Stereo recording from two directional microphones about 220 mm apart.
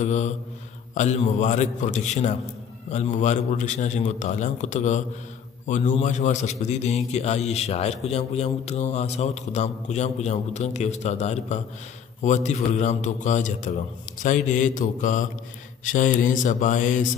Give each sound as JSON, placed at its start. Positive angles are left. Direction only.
{"t": 0.0, "sound": "a man's voice", "side_deg": 30}